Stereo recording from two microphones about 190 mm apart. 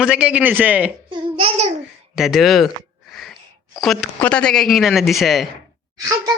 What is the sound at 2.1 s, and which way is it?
Speech, centre (ahead or behind).